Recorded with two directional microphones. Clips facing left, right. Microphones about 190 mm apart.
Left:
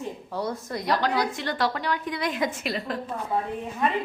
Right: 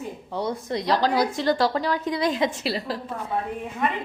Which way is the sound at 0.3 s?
20° right (ahead or behind).